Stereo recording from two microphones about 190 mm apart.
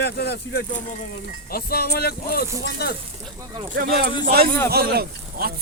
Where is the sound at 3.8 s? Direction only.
55° right (ahead or behind).